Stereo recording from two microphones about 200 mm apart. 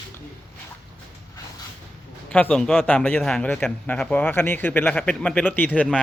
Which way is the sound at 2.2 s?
5° left (ahead or behind).